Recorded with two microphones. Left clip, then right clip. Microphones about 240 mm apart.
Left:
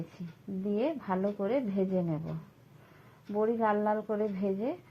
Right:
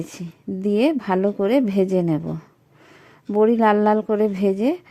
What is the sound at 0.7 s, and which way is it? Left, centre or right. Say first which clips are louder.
A woman's voice: right 12 dB; right.